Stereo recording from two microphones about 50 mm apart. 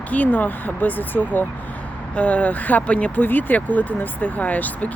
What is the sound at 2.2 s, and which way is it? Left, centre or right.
Speech, left.